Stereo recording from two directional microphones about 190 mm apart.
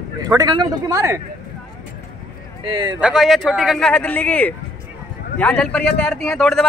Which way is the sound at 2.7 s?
20° right (ahead or behind).